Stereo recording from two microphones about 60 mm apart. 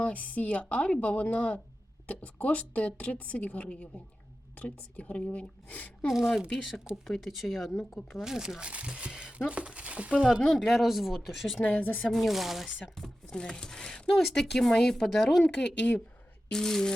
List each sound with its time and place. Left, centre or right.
0.0 s a woman's voice: left
6.1 s speech: centre
10.4 s speech: centre
11.6 s a woman's voice: left
12.0 s speech: centre
13.0 s speech: centre